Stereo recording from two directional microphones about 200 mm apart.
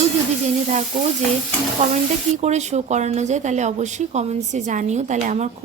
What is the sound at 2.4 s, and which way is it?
Speech, 35° right (ahead or behind).